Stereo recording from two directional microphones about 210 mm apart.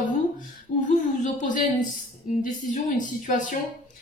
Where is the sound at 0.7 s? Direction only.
35° left (ahead or behind).